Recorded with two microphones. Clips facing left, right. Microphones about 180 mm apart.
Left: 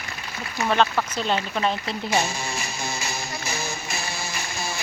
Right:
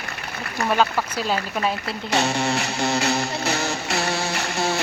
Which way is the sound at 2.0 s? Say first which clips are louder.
Right 4 dB; 70° right (ahead or behind).